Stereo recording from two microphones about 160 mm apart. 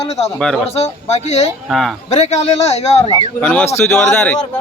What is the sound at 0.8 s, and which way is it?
A man's voice, 45° left (ahead or behind).